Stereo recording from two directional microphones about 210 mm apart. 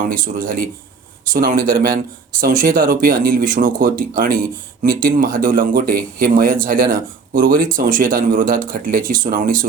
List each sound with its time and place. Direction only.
0.1 s speech: 40° right (ahead or behind)